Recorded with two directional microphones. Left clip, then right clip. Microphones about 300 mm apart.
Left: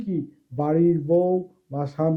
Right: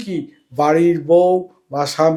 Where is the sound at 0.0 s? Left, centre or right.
Centre.